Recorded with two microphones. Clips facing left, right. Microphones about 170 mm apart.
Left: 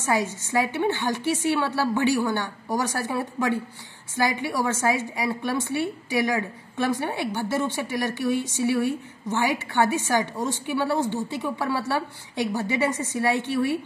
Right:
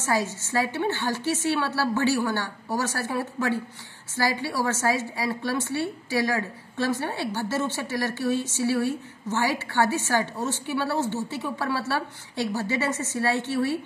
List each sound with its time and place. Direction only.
0.0 s a woman's voice: 15° left (ahead or behind)